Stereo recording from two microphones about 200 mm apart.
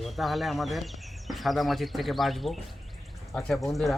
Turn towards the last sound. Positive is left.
turn(degrees=0)  # may be behind; listen again after turning